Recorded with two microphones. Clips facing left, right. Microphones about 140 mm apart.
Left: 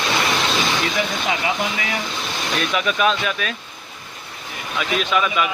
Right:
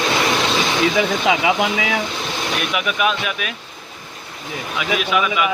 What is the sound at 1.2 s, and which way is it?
Speech, 90° right.